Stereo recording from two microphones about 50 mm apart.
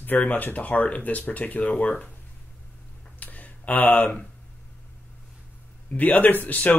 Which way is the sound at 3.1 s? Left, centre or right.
Left.